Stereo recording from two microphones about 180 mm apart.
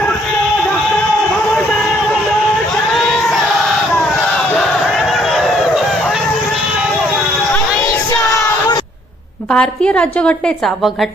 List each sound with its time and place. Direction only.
9.5 s a woman's voice: 5° left (ahead or behind)